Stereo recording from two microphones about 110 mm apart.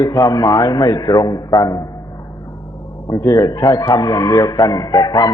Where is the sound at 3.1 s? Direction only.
30° left (ahead or behind).